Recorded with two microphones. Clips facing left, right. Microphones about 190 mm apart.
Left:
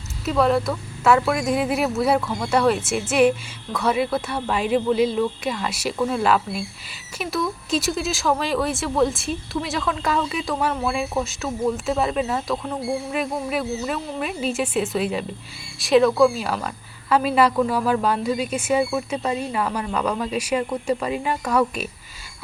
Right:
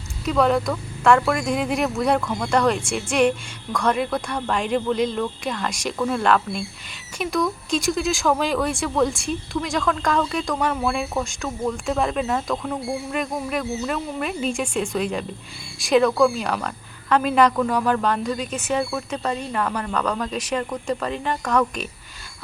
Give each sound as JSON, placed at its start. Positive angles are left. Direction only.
{"t": 0.3, "sound": "speech", "side_deg": 0}